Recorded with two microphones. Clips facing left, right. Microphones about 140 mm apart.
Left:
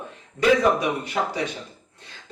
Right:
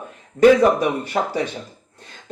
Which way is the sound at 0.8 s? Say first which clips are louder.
Right 4 dB; 50° right (ahead or behind).